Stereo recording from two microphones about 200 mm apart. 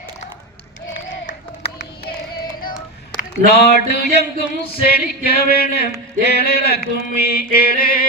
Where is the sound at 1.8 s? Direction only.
50° left (ahead or behind).